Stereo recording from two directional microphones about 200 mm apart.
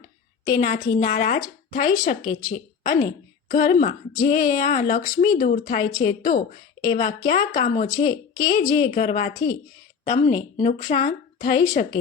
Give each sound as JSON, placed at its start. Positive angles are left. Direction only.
{"t": 0.5, "sound": "a woman's voice", "side_deg": 40}
{"t": 5.1, "sound": "speech", "side_deg": 20}
{"t": 5.4, "sound": "a woman's voice", "side_deg": 40}
{"t": 7.9, "sound": "speech", "side_deg": 20}
{"t": 8.9, "sound": "a woman's voice", "side_deg": 40}